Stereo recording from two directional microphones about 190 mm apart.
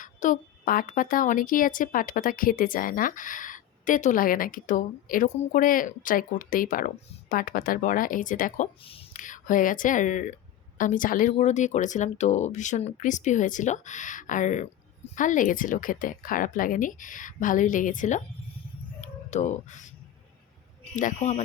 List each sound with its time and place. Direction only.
0.0 s a woman's voice: 45° left (ahead or behind)
9.1 s a woman's voice: 45° left (ahead or behind)
19.3 s speech: 40° left (ahead or behind)
20.9 s speech: 40° left (ahead or behind)